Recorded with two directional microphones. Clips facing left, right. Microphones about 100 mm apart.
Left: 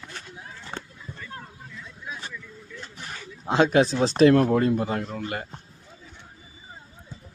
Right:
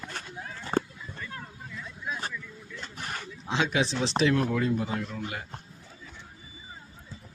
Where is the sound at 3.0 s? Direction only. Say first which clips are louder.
Right 4 dB; 60° right (ahead or behind).